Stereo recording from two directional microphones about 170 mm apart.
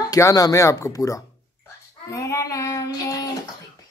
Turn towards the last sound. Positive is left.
turn(degrees=20)  # may be behind; listen again after turning